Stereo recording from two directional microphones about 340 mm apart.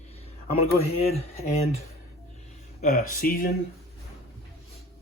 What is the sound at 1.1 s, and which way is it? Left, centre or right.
Speech, centre.